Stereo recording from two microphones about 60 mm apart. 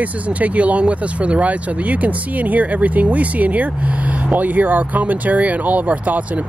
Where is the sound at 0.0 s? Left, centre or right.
Right.